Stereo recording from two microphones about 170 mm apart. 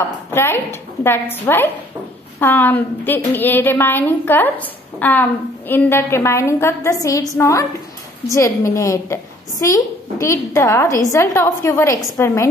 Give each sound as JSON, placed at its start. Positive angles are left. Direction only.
{"t": 0.0, "sound": "a woman's voice", "side_deg": 15}